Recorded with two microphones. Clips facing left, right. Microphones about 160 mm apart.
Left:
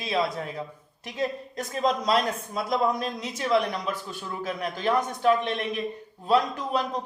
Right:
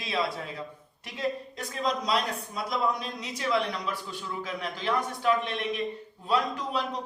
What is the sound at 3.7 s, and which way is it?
A man's voice, 45° left (ahead or behind).